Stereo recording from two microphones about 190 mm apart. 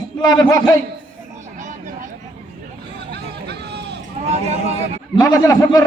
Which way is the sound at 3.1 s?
60° right (ahead or behind).